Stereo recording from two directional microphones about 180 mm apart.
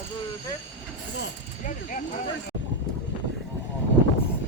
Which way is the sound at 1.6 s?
45° left (ahead or behind).